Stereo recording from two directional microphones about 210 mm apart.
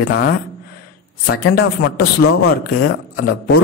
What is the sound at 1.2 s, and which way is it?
A man's voice, 50° left (ahead or behind).